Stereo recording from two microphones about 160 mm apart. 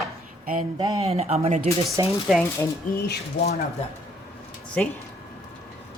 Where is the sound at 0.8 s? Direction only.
30° right (ahead or behind).